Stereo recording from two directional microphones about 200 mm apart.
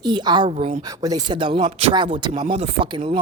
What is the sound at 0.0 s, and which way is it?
Speech, 20° right (ahead or behind).